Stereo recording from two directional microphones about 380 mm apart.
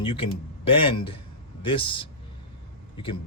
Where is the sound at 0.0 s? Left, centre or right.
Centre.